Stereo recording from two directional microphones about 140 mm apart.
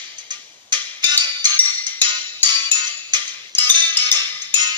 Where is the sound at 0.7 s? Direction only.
30° right (ahead or behind).